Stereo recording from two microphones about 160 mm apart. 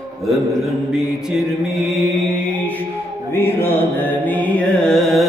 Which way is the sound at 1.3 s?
Centre (ahead or behind).